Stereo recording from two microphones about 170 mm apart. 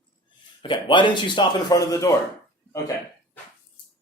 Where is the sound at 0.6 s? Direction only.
30° left (ahead or behind).